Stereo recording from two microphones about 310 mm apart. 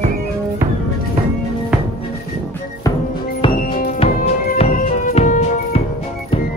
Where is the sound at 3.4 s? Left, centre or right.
Left.